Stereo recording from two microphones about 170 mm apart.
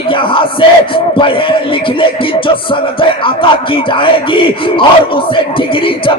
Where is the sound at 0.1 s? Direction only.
30° left (ahead or behind).